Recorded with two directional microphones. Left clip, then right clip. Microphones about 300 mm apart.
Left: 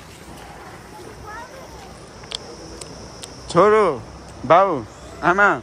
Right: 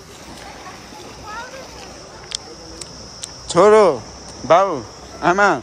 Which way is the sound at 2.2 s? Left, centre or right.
Centre.